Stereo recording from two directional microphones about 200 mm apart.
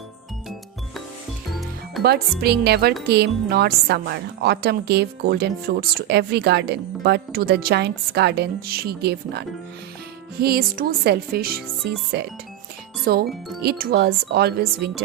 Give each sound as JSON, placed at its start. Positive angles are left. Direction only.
{"t": 2.0, "sound": "a woman's voice", "side_deg": -55}
{"t": 10.4, "sound": "a woman's voice", "side_deg": -50}